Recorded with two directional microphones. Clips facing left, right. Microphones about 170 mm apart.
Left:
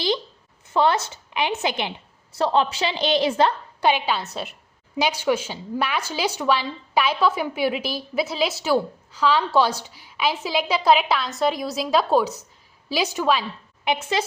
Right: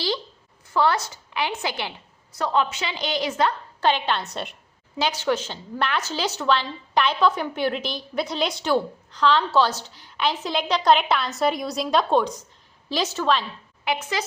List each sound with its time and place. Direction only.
0.7 s a woman's voice: 20° left (ahead or behind)
3.8 s a woman's voice: 10° left (ahead or behind)
13.8 s a woman's voice: 25° left (ahead or behind)